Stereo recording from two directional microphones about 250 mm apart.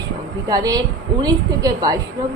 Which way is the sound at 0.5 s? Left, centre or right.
Centre.